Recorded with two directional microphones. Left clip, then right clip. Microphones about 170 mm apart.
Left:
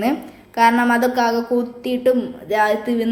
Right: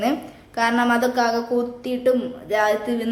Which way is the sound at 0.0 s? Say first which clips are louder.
Left 2 dB; 10° left (ahead or behind).